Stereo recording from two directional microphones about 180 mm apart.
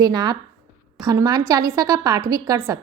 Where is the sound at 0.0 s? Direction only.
25° right (ahead or behind).